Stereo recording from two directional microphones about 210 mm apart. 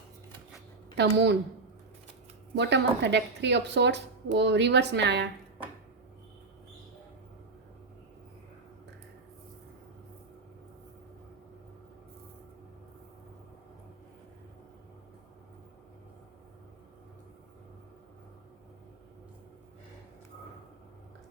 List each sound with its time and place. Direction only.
0.9 s speech: 55° right (ahead or behind)
2.6 s speech: 55° right (ahead or behind)